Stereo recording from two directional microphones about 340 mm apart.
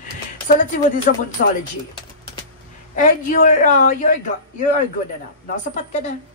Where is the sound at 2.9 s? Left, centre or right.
Left.